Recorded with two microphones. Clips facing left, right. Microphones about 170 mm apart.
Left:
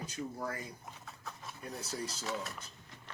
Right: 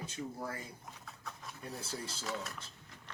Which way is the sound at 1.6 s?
30° right (ahead or behind).